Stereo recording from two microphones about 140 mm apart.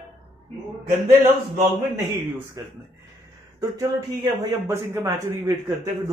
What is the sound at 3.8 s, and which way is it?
Speech, 25° right (ahead or behind).